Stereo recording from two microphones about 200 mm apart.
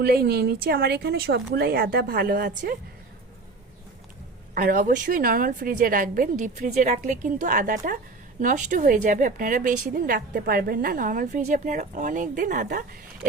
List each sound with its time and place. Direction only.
0.0 s a woman's voice: 50° right (ahead or behind)
4.5 s a woman's voice: 45° right (ahead or behind)